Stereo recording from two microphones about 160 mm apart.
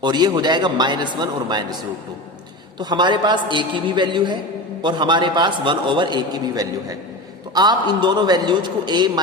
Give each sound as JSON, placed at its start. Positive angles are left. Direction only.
{"t": 0.0, "sound": "a man's voice", "side_deg": -25}